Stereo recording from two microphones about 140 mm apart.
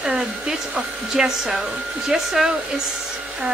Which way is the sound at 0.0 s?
5° right (ahead or behind).